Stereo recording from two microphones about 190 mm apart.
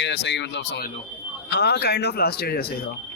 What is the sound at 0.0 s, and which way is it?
A man's voice, 65° left (ahead or behind).